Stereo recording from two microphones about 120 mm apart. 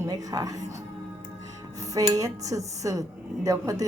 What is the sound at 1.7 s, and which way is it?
Dishes, 30° right (ahead or behind).